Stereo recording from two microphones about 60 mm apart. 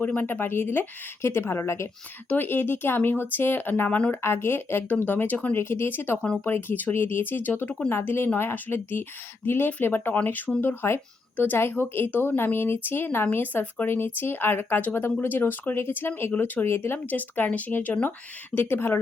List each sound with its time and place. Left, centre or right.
0.0 s a woman's voice: left
2.3 s a woman's voice: left
4.1 s a woman's voice: left
5.5 s a woman's voice: left
16.6 s a woman's voice: left